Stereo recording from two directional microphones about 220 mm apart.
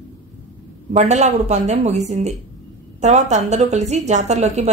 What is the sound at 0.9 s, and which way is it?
A woman's voice, 30° right (ahead or behind).